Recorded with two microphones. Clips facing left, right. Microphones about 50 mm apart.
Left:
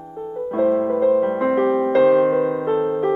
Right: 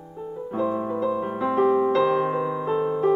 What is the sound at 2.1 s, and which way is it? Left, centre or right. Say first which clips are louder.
Piano: left 7 dB; left.